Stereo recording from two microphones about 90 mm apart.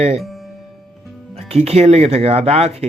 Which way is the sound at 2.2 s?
90° right.